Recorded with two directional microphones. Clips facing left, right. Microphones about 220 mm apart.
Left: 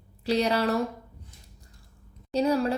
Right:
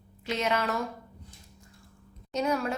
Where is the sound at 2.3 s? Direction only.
35° left (ahead or behind).